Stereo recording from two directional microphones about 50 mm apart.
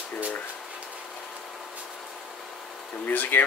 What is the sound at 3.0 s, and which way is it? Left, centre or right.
Speech, left.